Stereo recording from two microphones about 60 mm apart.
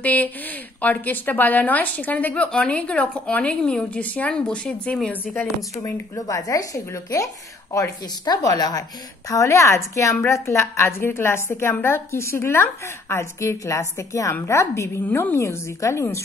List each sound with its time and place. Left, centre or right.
0.0 s speech: left
4.3 s speech: centre
5.1 s speech: left
5.8 s a woman's voice: left
9.3 s a woman's voice: left